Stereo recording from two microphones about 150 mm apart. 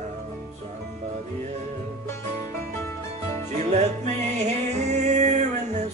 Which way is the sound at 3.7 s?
50° right (ahead or behind).